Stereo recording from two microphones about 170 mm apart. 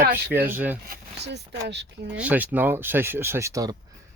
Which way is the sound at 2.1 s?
10° right (ahead or behind).